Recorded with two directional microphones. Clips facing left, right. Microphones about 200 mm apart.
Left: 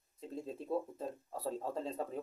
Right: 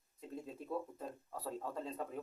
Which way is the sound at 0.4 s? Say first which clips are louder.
Left 5 dB; 30° left (ahead or behind).